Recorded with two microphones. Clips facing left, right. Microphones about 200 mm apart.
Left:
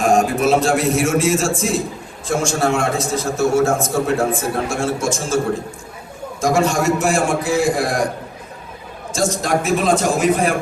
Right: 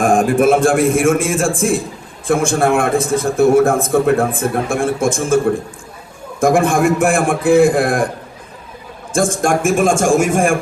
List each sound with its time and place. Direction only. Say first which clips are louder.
0.0 s a man's voice: right 3 dB; 55° right (ahead or behind)
6.4 s a man's voice: right 4 dB; 55° right (ahead or behind)
9.1 s a man's voice: right 4 dB; 50° right (ahead or behind)